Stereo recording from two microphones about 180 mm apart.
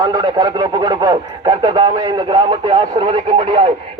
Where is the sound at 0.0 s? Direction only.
20° right (ahead or behind).